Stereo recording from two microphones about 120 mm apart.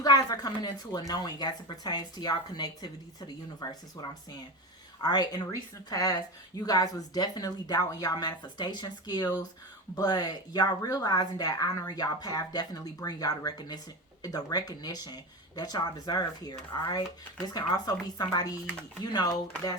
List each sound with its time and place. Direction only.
0.0 s speech: 35° left (ahead or behind)